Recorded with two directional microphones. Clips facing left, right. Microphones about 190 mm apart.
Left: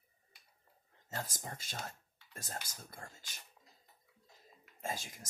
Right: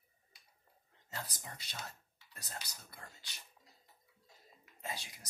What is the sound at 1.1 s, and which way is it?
Speech, 45° left (ahead or behind).